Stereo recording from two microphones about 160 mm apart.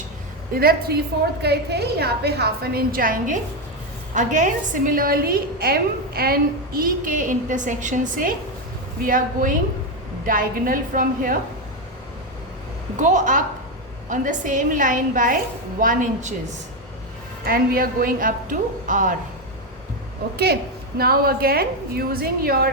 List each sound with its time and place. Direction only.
0.5 s a woman's voice: 75° right (ahead or behind)
1.4 s a woman's voice: 90° right; by 11.3 s 60° right (ahead or behind)
13.0 s a woman's voice: 50° right (ahead or behind)
17.4 s a woman's voice: 65° right (ahead or behind)
20.3 s a woman's voice: 90° right
21.0 s a woman's voice: 75° right (ahead or behind)